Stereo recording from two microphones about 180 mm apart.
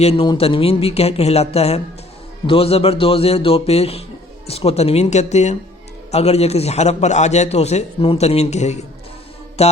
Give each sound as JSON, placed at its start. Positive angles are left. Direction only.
{"t": 0.0, "sound": "a man's voice", "side_deg": 35}
{"t": 9.6, "sound": "music", "side_deg": 35}